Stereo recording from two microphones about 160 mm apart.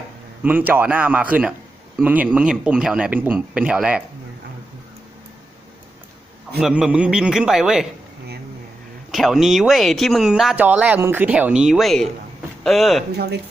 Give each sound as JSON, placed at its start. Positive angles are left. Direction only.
{"t": 0.4, "sound": "speech", "side_deg": -10}
{"t": 6.6, "sound": "speech", "side_deg": -5}
{"t": 9.1, "sound": "speech", "side_deg": 0}
{"t": 13.1, "sound": "speech", "side_deg": -90}